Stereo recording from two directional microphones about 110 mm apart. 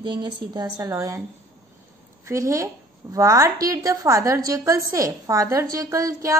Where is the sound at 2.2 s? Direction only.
30° right (ahead or behind).